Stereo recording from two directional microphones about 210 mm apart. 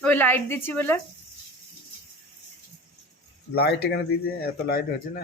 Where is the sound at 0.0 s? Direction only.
10° left (ahead or behind).